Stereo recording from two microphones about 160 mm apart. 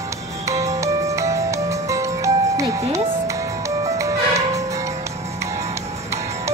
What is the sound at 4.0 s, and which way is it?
Music, 20° right (ahead or behind).